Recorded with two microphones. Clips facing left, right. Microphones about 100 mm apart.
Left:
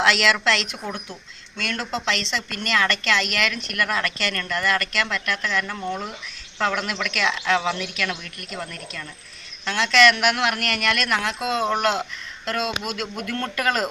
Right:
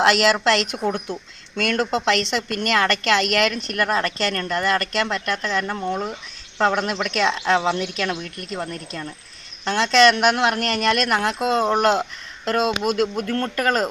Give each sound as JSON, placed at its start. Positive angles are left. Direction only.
{"t": 0.0, "sound": "a woman's voice", "side_deg": -45}